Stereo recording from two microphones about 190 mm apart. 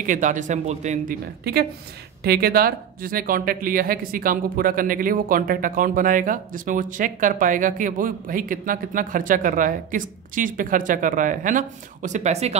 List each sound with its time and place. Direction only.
0.0 s speech: 45° right (ahead or behind)
1.4 s speech: 55° right (ahead or behind); by 12.5 s 35° right (ahead or behind)